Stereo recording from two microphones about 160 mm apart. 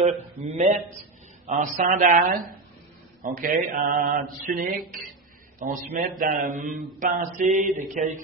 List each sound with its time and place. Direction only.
0.0 s speech: 45° right (ahead or behind)
1.5 s mantra: 55° right (ahead or behind)
5.6 s speech: 50° right (ahead or behind)
6.1 s mantra: 60° right (ahead or behind)